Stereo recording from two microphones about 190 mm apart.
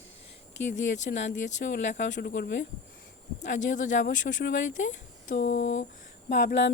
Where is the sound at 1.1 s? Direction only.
55° left (ahead or behind).